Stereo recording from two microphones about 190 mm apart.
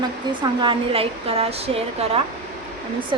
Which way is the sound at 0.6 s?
30° right (ahead or behind).